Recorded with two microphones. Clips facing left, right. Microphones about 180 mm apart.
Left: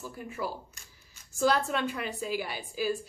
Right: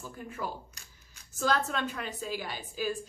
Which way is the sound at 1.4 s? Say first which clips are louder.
Left 3 dB; 10° left (ahead or behind).